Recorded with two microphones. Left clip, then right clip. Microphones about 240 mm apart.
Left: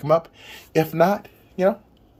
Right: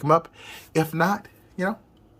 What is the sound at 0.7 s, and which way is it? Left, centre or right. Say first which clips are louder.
Speech: left 5 dB; centre.